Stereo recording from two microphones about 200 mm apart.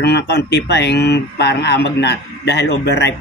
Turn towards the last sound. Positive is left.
turn(degrees=55)  # may be behind; listen again after turning